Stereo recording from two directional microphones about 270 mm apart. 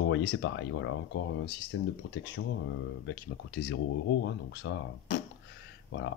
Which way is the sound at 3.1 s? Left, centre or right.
Left.